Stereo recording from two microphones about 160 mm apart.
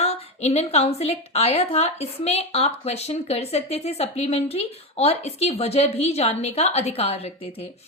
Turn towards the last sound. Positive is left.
turn(degrees=40)  # may be behind; listen again after turning